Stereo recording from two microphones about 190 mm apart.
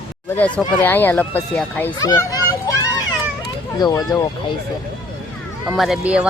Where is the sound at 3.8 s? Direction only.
20° left (ahead or behind).